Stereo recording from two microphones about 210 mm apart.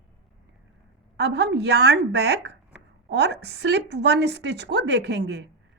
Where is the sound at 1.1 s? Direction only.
55° right (ahead or behind).